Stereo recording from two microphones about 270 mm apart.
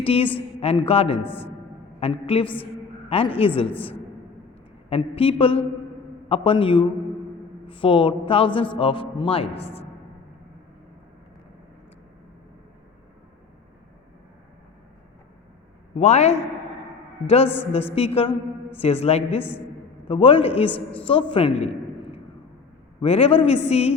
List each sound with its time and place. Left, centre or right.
0.0 s a woman's voice: left
1.2 s a man's voice: centre
2.0 s speech: left
4.9 s speech: left
16.0 s a man's voice: left